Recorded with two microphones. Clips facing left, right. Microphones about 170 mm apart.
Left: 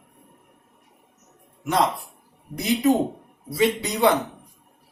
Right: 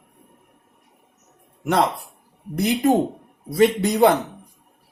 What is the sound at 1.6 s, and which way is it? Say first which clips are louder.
A man's voice: right 2 dB; 60° right (ahead or behind).